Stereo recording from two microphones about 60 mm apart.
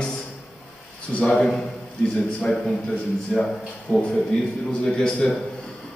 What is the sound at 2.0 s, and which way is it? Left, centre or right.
A man's voice, centre.